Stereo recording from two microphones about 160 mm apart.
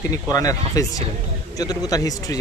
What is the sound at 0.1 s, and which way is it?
Speech, 20° left (ahead or behind).